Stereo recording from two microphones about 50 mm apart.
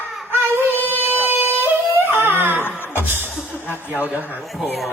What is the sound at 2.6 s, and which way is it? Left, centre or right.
Music, left.